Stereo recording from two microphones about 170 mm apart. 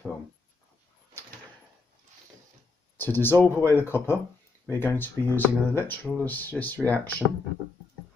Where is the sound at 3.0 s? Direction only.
10° left (ahead or behind).